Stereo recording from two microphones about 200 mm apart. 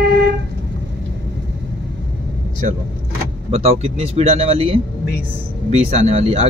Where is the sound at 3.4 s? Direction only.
30° right (ahead or behind).